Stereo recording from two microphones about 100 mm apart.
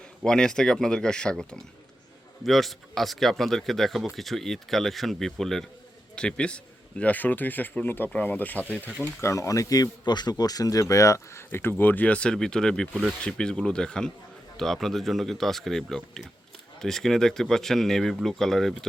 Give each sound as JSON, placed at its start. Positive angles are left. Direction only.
{"t": 0.3, "sound": "speech", "side_deg": 5}
{"t": 9.0, "sound": "speech", "side_deg": 30}